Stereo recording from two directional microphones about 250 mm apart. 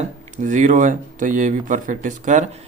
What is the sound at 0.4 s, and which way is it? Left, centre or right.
Speech, right.